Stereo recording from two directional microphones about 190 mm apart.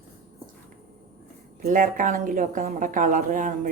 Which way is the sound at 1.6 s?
45° right (ahead or behind).